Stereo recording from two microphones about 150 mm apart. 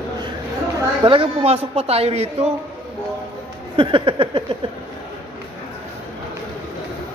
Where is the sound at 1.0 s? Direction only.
35° right (ahead or behind).